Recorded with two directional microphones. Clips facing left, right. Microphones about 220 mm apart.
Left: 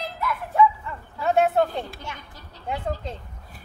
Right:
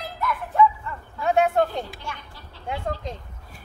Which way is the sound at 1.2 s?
Centre (ahead or behind).